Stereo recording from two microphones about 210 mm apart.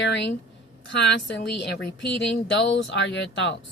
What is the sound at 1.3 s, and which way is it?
Speech, 55° left (ahead or behind).